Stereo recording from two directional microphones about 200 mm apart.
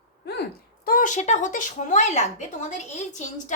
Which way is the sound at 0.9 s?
40° left (ahead or behind).